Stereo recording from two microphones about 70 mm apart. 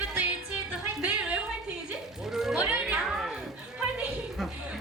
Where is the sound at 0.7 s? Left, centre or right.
Centre.